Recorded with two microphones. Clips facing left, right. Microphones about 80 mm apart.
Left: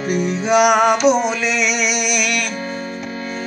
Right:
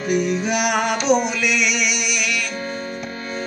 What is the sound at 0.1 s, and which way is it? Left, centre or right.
Music, left.